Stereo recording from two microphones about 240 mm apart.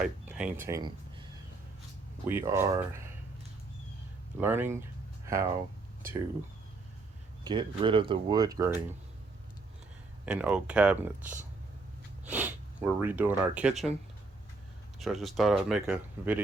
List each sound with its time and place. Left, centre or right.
0.0 s speech: centre
4.4 s speech: centre
7.4 s speech: centre
10.2 s speech: centre
14.9 s speech: centre